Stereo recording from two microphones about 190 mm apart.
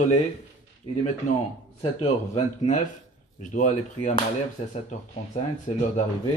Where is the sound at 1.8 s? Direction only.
30° left (ahead or behind).